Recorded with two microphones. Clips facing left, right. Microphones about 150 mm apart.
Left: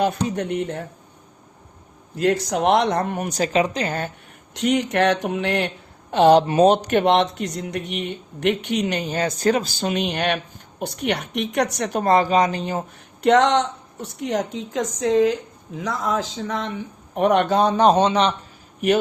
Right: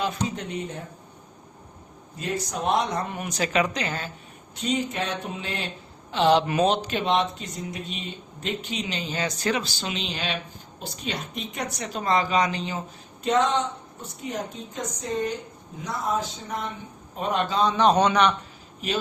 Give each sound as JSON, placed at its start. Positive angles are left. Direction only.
{"t": 0.0, "sound": "speech", "side_deg": 55}
{"t": 2.1, "sound": "speech", "side_deg": 85}
{"t": 3.6, "sound": "speech", "side_deg": 25}
{"t": 3.8, "sound": "speech", "side_deg": 55}
{"t": 4.5, "sound": "speech", "side_deg": 75}
{"t": 6.4, "sound": "speech", "side_deg": 30}
{"t": 6.7, "sound": "speech", "side_deg": 60}
{"t": 13.2, "sound": "a woman's voice", "side_deg": 75}
{"t": 17.9, "sound": "a man's voice", "side_deg": 30}